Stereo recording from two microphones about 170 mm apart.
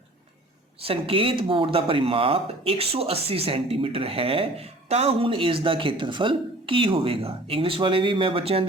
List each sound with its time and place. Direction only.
0.8 s speech: 35° right (ahead or behind)